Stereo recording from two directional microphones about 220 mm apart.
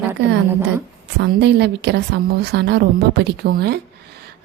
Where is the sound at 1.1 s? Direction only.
50° right (ahead or behind).